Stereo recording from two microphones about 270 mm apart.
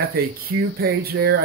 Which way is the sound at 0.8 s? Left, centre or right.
Right.